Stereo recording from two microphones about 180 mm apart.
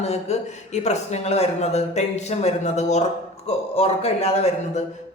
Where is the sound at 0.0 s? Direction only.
35° left (ahead or behind).